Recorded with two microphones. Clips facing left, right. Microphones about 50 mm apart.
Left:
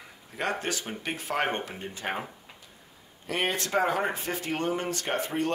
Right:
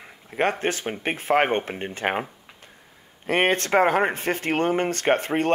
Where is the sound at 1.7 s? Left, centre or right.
Right.